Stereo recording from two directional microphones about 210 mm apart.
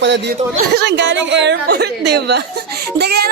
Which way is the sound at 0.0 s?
55° right (ahead or behind).